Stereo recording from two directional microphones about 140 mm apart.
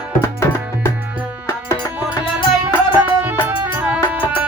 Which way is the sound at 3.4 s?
15° right (ahead or behind).